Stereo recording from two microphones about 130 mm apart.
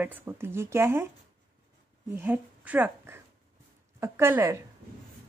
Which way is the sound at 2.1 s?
15° right (ahead or behind).